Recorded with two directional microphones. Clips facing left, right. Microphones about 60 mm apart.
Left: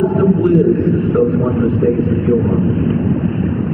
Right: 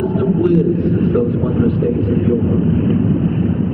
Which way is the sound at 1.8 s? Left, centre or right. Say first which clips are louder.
Left 2 dB; left.